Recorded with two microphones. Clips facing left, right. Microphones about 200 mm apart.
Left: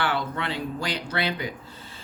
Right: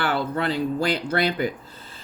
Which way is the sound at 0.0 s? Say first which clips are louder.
Right 4 dB; 40° right (ahead or behind).